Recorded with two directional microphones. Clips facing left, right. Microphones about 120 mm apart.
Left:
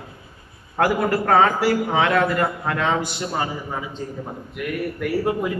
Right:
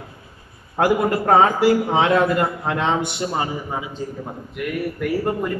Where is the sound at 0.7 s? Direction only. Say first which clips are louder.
Right 1 dB; 20° right (ahead or behind).